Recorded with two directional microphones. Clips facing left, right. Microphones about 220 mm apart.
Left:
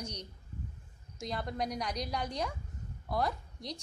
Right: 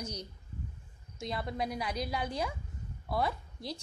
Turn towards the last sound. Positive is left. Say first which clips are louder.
# right 1 dB
turn(degrees=-5)  # may be behind; listen again after turning